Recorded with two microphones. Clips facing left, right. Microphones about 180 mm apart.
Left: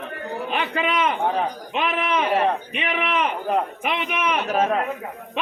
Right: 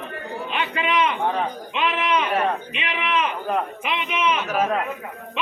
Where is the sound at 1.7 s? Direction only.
45° left (ahead or behind).